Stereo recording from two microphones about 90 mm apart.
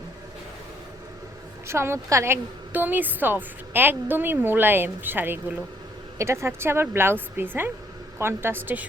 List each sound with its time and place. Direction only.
1.6 s a woman's voice: 30° right (ahead or behind)